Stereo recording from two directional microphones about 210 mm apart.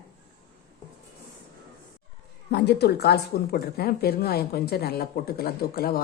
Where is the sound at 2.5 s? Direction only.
50° left (ahead or behind).